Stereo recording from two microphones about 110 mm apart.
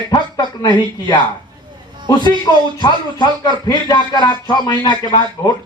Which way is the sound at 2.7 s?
40° left (ahead or behind).